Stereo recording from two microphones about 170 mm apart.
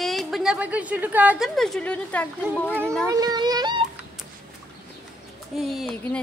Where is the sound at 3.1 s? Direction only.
25° right (ahead or behind).